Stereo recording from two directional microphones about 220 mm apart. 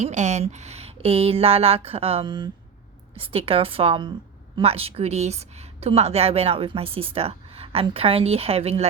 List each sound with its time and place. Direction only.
0.0 s a woman's voice: 30° right (ahead or behind)